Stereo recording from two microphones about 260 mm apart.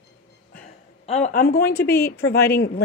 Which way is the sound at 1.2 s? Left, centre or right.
Left.